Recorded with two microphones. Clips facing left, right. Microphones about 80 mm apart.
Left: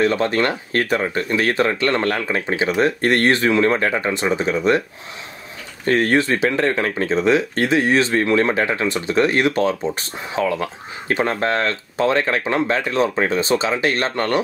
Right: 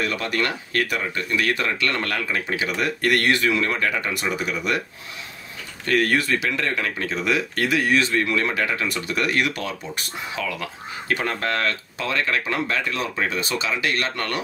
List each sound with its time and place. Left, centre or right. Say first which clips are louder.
0.0 s speech: left 7 dB; left
5.9 s speech: left 4 dB; left